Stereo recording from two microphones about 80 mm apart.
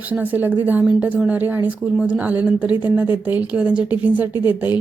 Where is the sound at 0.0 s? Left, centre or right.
Right.